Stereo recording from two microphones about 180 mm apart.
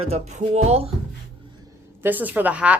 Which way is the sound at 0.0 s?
35° right (ahead or behind).